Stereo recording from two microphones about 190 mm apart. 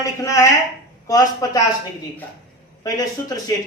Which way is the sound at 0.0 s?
15° left (ahead or behind).